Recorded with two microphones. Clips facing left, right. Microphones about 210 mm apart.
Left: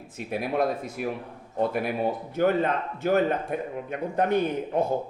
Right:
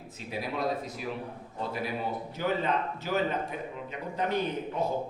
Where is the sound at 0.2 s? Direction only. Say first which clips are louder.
Left 7 dB; 55° left (ahead or behind).